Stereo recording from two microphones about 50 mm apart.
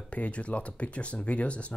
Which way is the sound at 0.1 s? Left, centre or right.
Left.